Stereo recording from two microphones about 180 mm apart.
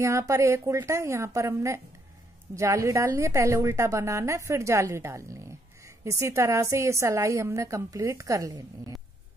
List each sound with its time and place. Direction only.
0.0 s a woman's voice: 15° right (ahead or behind)